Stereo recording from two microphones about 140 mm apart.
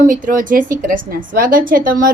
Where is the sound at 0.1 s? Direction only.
70° right (ahead or behind).